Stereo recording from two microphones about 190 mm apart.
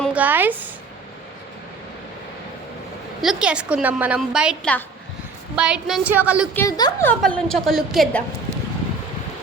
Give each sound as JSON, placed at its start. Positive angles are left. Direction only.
{"t": 0.1, "sound": "a sound", "side_deg": -10}
{"t": 3.2, "sound": "a woman's voice", "side_deg": -5}
{"t": 6.5, "sound": "a woman's voice", "side_deg": 15}
{"t": 7.0, "sound": "a woman's voice", "side_deg": 5}